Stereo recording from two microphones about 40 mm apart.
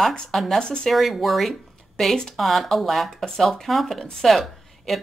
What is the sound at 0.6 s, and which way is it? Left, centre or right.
Speech, left.